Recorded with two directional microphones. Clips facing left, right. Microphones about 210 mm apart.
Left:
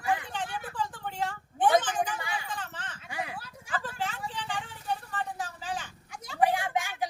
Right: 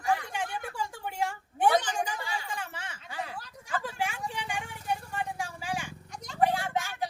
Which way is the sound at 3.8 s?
10° right (ahead or behind).